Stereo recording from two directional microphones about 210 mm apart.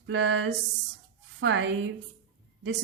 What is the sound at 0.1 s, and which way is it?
A woman's voice, 60° right (ahead or behind).